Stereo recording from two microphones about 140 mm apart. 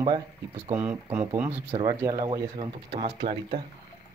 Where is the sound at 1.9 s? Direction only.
20° right (ahead or behind).